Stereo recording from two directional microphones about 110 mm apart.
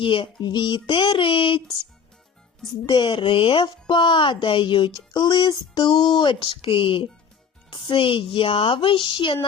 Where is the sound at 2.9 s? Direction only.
45° left (ahead or behind).